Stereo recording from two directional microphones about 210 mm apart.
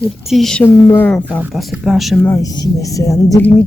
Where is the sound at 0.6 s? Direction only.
10° left (ahead or behind).